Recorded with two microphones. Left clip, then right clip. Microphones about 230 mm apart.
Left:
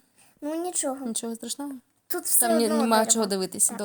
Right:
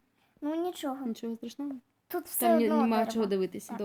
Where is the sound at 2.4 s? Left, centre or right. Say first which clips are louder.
Left 2 dB; left.